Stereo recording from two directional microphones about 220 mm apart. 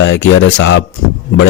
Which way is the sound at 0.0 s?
55° left (ahead or behind).